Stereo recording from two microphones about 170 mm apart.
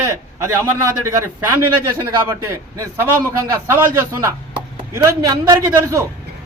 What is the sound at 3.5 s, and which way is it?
A man's voice, 15° right (ahead or behind).